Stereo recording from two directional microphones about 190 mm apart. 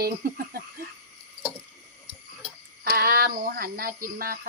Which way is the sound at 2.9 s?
55° right (ahead or behind).